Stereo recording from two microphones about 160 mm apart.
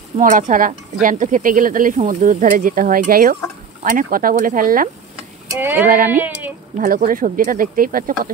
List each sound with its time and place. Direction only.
0.2 s speech: 55° right (ahead or behind)
5.5 s speech: 15° right (ahead or behind)
5.9 s speech: 60° right (ahead or behind)